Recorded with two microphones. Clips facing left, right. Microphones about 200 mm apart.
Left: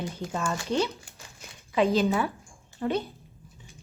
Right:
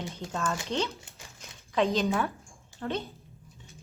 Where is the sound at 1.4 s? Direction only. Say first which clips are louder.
Left 2 dB; 5° left (ahead or behind).